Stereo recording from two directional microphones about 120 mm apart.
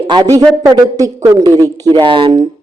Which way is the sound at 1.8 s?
40° right (ahead or behind).